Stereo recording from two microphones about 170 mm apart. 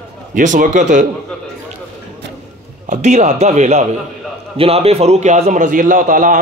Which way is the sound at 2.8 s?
45° right (ahead or behind).